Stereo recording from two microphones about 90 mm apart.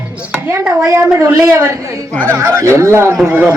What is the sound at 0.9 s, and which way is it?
Speech, 30° right (ahead or behind).